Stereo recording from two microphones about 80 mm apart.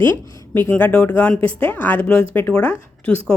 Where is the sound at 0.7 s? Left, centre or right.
Centre.